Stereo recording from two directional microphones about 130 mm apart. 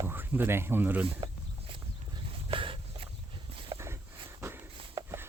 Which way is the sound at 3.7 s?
25° right (ahead or behind).